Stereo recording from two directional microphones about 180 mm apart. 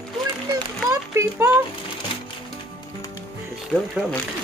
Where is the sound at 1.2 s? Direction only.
15° right (ahead or behind).